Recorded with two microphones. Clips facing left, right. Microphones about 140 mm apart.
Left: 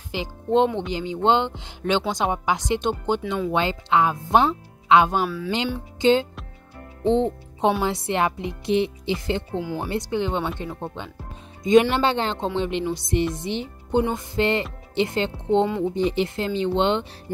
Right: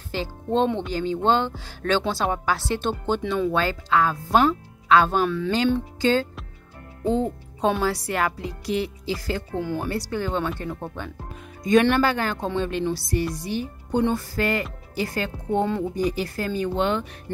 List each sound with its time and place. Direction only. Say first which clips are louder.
0.1 s speech: left 3 dB; 15° left (ahead or behind)
5.5 s speech: right 4 dB; 20° left (ahead or behind)
7.8 s speech: left 1 dB; 20° left (ahead or behind)